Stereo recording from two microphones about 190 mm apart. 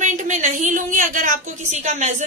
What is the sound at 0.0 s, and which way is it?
A woman's voice, 40° right (ahead or behind).